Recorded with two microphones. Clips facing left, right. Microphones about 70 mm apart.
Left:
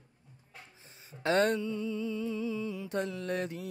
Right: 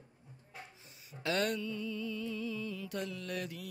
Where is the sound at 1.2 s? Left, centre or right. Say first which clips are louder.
Left 6 dB; left.